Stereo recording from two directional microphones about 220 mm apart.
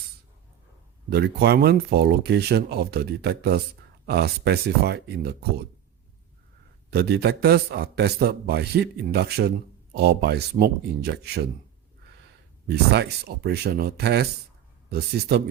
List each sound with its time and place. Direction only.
1.1 s a man's voice: 50° right (ahead or behind)
6.9 s a man's voice: 45° right (ahead or behind)
12.6 s a man's voice: 50° right (ahead or behind)